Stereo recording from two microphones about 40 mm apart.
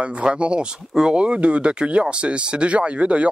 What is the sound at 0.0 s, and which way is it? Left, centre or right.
Speech, right.